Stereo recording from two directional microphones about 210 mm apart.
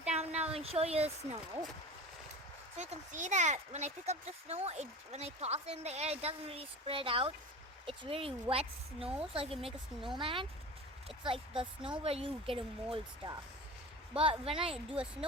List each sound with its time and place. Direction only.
0.1 s a sound: 30° right (ahead or behind)
0.5 s speech: 30° right (ahead or behind)
2.7 s speech: 35° right (ahead or behind)